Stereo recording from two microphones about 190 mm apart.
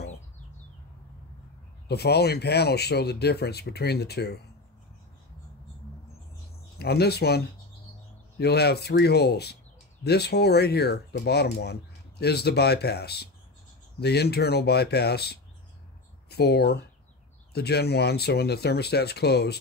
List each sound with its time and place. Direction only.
1.9 s speech: 60° left (ahead or behind)
6.8 s speech: 55° left (ahead or behind)